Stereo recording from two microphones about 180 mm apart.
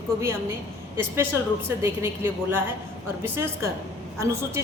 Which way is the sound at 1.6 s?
15° right (ahead or behind).